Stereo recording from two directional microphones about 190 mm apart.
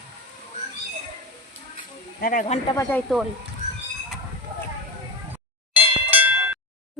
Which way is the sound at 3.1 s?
Centre (ahead or behind).